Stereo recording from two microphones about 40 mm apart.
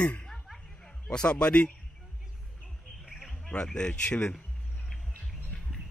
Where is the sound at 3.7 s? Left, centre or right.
Left.